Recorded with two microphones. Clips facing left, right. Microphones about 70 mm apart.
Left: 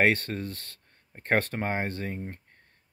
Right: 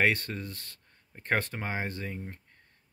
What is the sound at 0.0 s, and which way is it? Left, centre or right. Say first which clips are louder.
Speech: left 3 dB; left.